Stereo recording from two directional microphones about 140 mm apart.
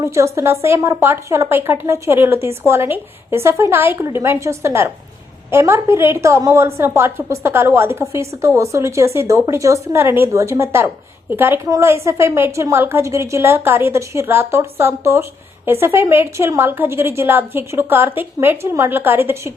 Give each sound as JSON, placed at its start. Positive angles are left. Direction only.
{"t": 0.0, "sound": "a woman's voice", "side_deg": -20}